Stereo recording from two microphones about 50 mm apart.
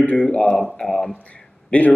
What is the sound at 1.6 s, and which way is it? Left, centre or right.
Speech, left.